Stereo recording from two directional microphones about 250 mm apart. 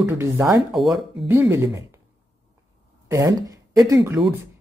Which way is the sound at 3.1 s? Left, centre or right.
Centre.